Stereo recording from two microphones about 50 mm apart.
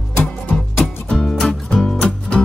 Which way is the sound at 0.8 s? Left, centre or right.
Centre.